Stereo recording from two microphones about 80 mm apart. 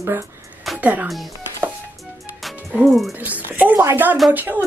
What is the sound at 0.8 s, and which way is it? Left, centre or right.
Speech, right.